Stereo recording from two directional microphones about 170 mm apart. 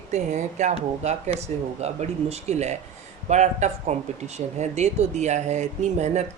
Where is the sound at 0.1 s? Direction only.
45° right (ahead or behind).